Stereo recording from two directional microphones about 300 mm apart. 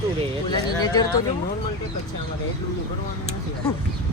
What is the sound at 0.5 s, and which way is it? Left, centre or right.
Speech, centre.